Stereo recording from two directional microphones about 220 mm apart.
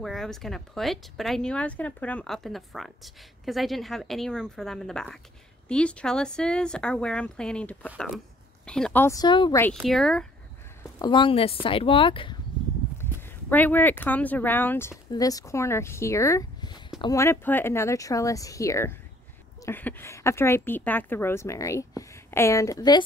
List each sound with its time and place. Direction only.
0.0 s a woman's voice: centre (ahead or behind); by 9.6 s 20° left (ahead or behind)
9.8 s speech: centre (ahead or behind)
10.8 s speech: 20° left (ahead or behind)
12.9 s a woman's voice: 10° left (ahead or behind)